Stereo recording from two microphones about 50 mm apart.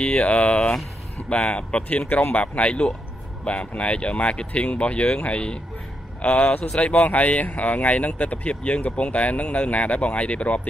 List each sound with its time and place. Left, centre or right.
0.0 s speech: left